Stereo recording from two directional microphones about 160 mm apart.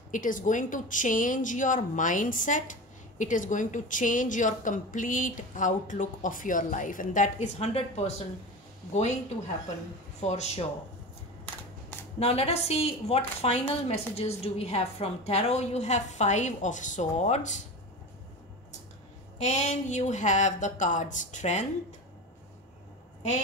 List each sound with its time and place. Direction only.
0.1 s a woman's voice: 55° left (ahead or behind)
10.2 s a woman's voice: 45° left (ahead or behind)
12.2 s a woman's voice: 40° left (ahead or behind)
19.3 s a woman's voice: 45° left (ahead or behind)